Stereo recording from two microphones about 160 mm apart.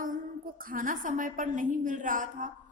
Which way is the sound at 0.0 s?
60° right (ahead or behind).